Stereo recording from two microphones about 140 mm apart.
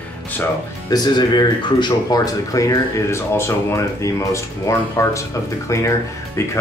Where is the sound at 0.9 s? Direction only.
30° left (ahead or behind).